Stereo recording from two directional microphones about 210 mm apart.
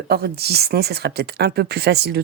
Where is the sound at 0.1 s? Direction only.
50° right (ahead or behind).